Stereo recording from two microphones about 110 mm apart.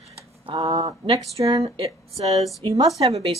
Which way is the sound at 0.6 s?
35° right (ahead or behind).